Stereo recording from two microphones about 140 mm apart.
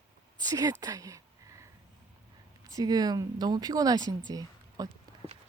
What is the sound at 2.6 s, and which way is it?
Speech, 25° right (ahead or behind).